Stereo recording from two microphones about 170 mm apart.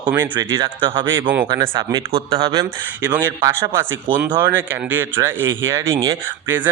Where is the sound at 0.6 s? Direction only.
30° right (ahead or behind).